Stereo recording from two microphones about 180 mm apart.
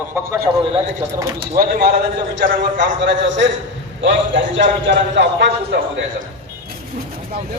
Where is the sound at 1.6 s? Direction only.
50° right (ahead or behind).